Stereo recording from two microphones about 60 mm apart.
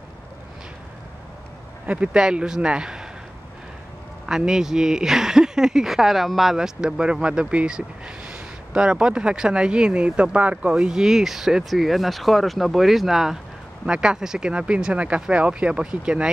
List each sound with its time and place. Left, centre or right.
1.9 s speech: centre
4.3 s speech: centre